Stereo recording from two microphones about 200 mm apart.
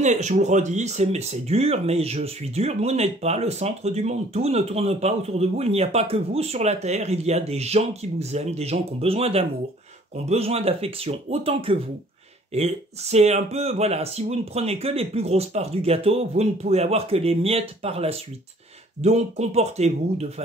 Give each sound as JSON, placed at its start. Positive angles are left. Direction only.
{"t": 0.0, "sound": "speech", "side_deg": -35}